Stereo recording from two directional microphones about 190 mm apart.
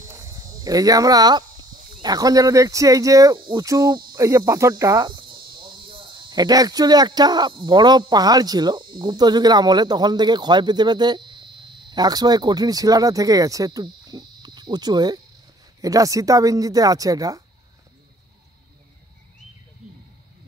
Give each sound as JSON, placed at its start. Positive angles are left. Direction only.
{"t": 0.1, "sound": "speech", "side_deg": -15}